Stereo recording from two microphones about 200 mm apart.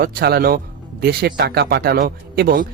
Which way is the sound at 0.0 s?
55° right (ahead or behind).